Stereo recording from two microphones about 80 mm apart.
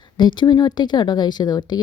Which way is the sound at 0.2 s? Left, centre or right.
Left.